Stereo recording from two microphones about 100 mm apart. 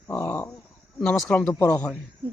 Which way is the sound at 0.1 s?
20° left (ahead or behind).